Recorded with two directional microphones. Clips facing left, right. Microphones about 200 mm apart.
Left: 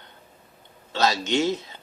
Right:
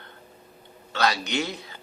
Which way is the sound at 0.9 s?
25° left (ahead or behind).